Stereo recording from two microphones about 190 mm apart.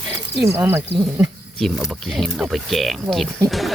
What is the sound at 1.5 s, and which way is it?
Speech, centre (ahead or behind).